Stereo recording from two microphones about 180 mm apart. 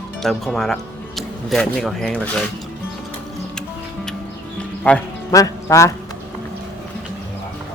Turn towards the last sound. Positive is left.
turn(degrees=15)  # may be behind; listen again after turning